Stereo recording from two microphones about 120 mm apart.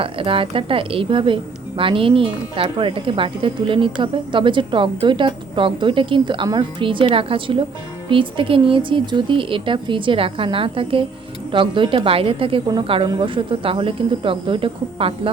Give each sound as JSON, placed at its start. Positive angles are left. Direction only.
{"t": 0.0, "sound": "a woman's voice", "side_deg": -50}